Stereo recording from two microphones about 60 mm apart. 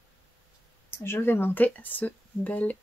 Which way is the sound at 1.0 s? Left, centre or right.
Left.